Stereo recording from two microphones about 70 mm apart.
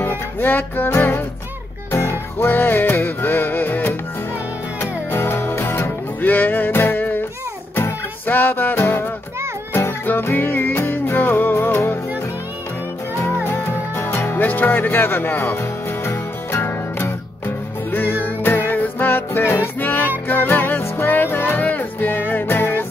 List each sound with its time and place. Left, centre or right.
0.0 s music: left
1.9 s music: left
5.1 s music: left
13.1 s music: left
14.4 s music: left
17.9 s music: left